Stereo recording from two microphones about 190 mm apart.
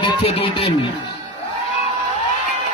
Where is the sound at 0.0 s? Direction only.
30° left (ahead or behind).